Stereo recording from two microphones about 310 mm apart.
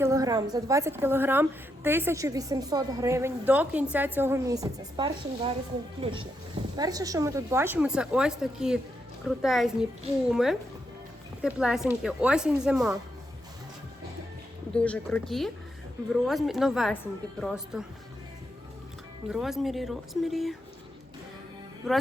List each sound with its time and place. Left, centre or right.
0.0 s a woman's voice: centre
14.8 s a woman's voice: centre
19.3 s a woman's voice: centre
21.8 s a woman's voice: centre